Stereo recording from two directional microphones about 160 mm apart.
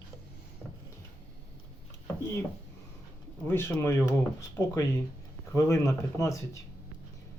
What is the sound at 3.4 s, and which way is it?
Speech, 15° left (ahead or behind).